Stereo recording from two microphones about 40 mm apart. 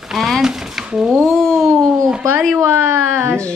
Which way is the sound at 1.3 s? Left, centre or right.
Centre.